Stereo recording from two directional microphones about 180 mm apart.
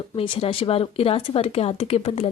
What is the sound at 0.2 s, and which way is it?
Speech, 30° left (ahead or behind).